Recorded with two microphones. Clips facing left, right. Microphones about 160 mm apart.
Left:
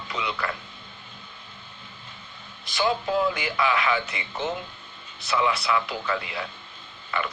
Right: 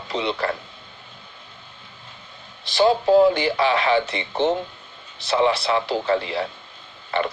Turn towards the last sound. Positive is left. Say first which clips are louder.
# right 6 dB
turn(degrees=-40)  # may be behind; listen again after turning